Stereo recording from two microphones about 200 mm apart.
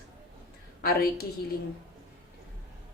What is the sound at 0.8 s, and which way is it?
Speech, 50° left (ahead or behind).